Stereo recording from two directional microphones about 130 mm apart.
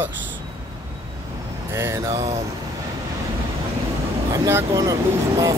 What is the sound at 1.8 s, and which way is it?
Speech, 20° right (ahead or behind).